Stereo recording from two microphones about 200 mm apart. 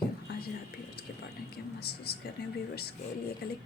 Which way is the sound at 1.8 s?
50° left (ahead or behind).